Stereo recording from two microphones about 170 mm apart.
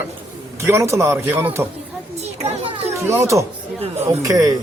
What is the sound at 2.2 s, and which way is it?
Children playing, 40° right (ahead or behind).